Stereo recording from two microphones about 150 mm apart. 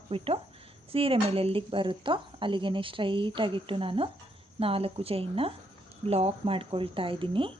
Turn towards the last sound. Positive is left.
turn(degrees=-35)  # may be behind; listen again after turning